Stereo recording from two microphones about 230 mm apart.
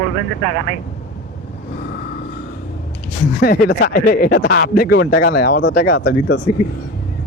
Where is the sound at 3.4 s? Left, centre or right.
Left.